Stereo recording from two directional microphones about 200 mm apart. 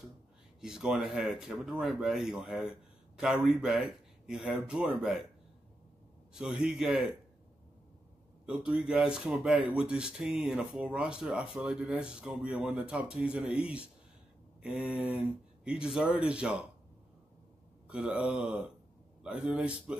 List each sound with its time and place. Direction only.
0.6 s speech: 5° right (ahead or behind)
6.3 s speech: 5° right (ahead or behind)
8.5 s speech: 5° right (ahead or behind)
17.8 s speech: 5° right (ahead or behind)